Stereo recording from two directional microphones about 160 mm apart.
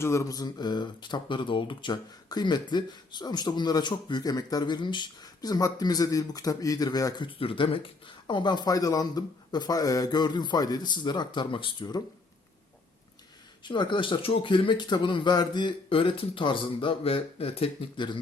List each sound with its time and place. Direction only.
0.0 s speech: 15° left (ahead or behind)
13.7 s speech: 30° left (ahead or behind)